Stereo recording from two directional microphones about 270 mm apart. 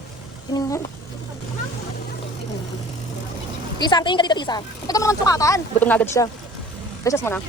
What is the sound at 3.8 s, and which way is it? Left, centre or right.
Speech, centre.